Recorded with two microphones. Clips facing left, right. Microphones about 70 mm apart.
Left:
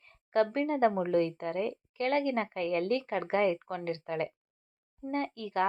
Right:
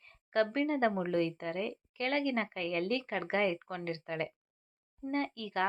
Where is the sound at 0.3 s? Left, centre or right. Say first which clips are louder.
Left 2 dB; left.